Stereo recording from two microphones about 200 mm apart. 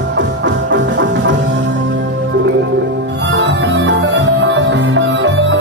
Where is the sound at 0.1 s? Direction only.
60° right (ahead or behind).